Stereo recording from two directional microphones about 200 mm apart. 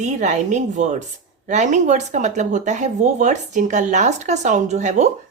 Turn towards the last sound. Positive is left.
turn(degrees=-35)  # may be behind; listen again after turning